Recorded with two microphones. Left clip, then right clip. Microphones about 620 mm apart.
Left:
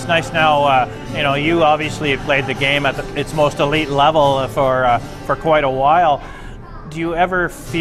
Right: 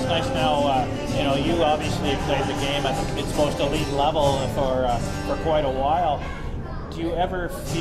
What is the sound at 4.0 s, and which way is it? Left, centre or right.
Speech, left.